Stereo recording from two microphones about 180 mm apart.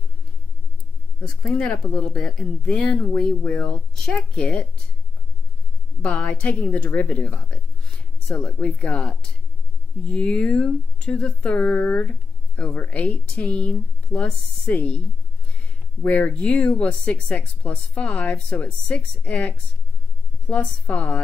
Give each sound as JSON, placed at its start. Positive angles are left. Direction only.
{"t": 1.4, "sound": "speech", "side_deg": 5}
{"t": 6.0, "sound": "speech", "side_deg": 5}